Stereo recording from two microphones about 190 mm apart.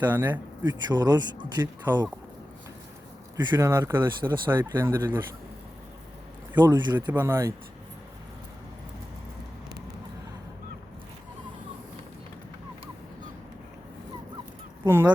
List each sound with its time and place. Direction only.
0.0 s speech: 10° right (ahead or behind)
0.6 s speech: 20° right (ahead or behind)
3.3 s speech: 15° right (ahead or behind)
6.6 s speech: 25° right (ahead or behind)
7.1 s speech: 10° right (ahead or behind)
14.8 s speech: 10° right (ahead or behind)